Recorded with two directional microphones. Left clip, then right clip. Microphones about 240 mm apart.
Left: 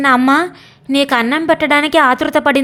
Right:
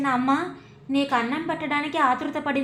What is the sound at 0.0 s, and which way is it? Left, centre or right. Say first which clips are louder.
A woman's voice: left 12 dB; left.